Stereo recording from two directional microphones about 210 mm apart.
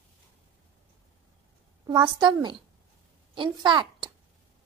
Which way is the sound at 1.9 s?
20° right (ahead or behind).